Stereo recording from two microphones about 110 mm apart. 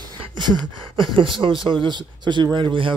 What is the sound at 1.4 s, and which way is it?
Speech, 50° right (ahead or behind).